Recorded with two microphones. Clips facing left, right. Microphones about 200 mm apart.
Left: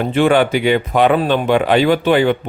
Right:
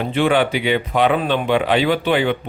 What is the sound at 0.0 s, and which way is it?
A man's voice, 45° left (ahead or behind).